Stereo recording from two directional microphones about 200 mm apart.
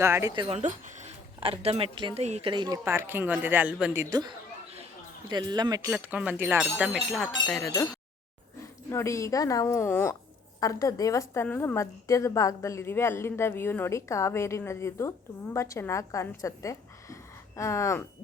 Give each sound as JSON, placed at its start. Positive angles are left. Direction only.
{"t": 0.0, "sound": "speech", "side_deg": -15}
{"t": 0.4, "sound": "speech", "side_deg": -35}
{"t": 8.9, "sound": "a woman's voice", "side_deg": 15}